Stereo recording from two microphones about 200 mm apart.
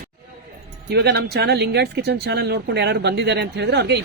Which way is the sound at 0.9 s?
55° right (ahead or behind).